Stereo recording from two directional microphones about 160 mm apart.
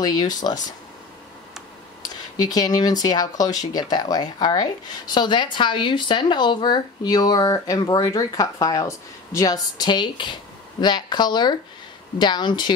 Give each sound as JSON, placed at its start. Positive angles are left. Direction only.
{"t": 0.0, "sound": "speech", "side_deg": 25}
{"t": 2.0, "sound": "speech", "side_deg": 25}